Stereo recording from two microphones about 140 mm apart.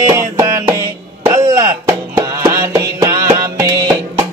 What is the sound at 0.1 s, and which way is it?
Music, 20° right (ahead or behind).